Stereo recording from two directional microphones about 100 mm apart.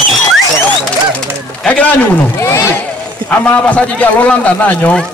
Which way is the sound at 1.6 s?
15° left (ahead or behind).